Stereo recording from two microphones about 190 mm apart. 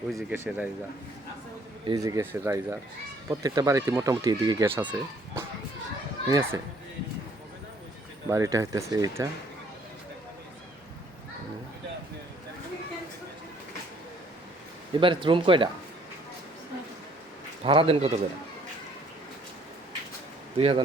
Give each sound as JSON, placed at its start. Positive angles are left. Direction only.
{"t": 0.1, "sound": "speech", "side_deg": 0}
{"t": 1.9, "sound": "speech", "side_deg": -20}
{"t": 8.3, "sound": "speech", "side_deg": -15}
{"t": 15.0, "sound": "speech", "side_deg": -25}
{"t": 17.6, "sound": "a man's voice", "side_deg": -30}
{"t": 20.6, "sound": "speech", "side_deg": -30}